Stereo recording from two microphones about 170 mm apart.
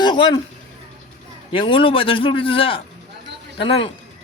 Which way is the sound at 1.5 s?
30° left (ahead or behind).